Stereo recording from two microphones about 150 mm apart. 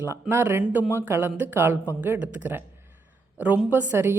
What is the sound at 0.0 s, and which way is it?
A woman's voice, 15° right (ahead or behind).